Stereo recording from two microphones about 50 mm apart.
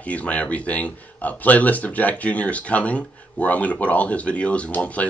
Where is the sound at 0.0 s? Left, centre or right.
Left.